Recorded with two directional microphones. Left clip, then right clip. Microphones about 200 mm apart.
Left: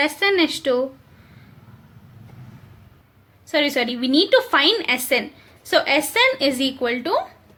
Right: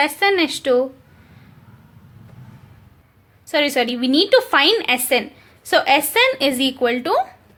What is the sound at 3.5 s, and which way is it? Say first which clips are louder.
A woman's voice: right 2 dB; 15° right (ahead or behind).